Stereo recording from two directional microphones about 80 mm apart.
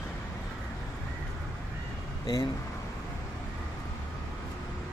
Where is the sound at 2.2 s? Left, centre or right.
Left.